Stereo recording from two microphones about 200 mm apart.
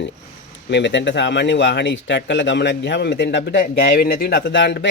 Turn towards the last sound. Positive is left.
turn(degrees=60)  # may be behind; listen again after turning